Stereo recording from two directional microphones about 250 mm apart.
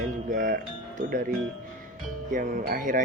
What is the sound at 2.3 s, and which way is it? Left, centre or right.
Speech, right.